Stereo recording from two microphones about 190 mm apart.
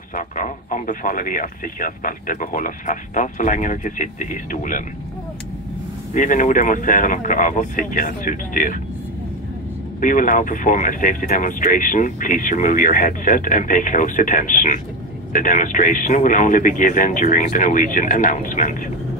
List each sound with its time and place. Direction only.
0.1 s speech: 45° left (ahead or behind)
6.1 s speech: 40° left (ahead or behind)
9.9 s speech: 45° left (ahead or behind)